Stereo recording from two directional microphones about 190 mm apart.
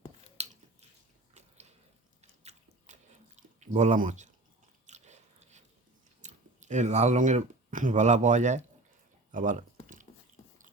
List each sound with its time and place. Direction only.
0.4 s a sound: 35° right (ahead or behind)
2.2 s chewing: 35° right (ahead or behind)
4.9 s biting: 40° right (ahead or behind)
6.2 s speech: 40° right (ahead or behind)